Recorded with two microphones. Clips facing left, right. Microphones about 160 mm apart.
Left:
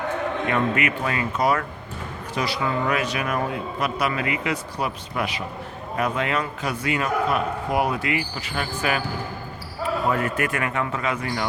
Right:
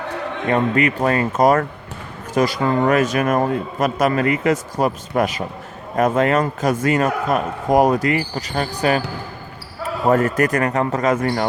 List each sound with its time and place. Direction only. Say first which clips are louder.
0.1 s a man's voice: right 5 dB; 35° right (ahead or behind)
10.1 s a man's voice: right 12 dB; 40° right (ahead or behind)